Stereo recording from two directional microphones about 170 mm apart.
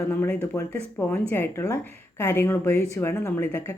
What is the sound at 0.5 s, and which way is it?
A woman's voice, 15° left (ahead or behind).